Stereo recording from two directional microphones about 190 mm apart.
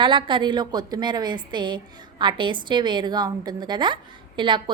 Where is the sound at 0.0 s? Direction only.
25° right (ahead or behind).